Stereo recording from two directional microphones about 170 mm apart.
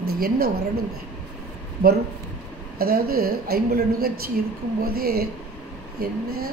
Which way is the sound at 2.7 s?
60° right (ahead or behind).